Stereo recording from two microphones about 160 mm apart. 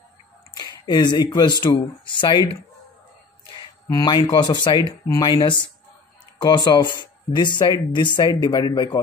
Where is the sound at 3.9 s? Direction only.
25° left (ahead or behind).